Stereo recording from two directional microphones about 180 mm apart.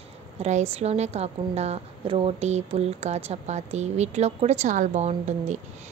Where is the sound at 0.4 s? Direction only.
40° right (ahead or behind).